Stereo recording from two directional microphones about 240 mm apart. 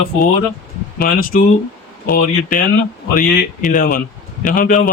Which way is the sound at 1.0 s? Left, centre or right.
Left.